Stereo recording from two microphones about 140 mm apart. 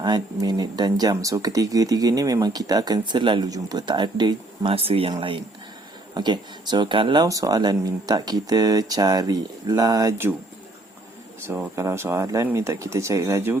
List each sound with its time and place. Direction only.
0.4 s speech: 30° right (ahead or behind)
11.4 s speech: 15° right (ahead or behind)